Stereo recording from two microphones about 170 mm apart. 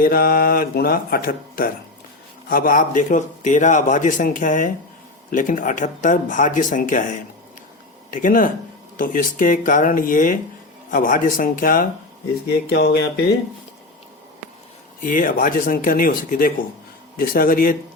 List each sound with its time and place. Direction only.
0.0 s a man's voice: 60° left (ahead or behind)
12.6 s speech: 80° left
15.0 s speech: 50° left (ahead or behind)